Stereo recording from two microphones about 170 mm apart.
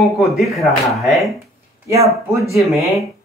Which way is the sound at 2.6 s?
Centre (ahead or behind).